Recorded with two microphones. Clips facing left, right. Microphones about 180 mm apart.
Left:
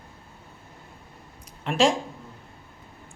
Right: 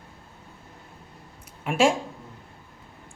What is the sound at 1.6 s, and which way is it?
Speech, 10° right (ahead or behind).